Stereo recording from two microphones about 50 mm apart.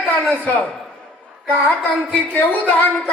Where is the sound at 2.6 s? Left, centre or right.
Left.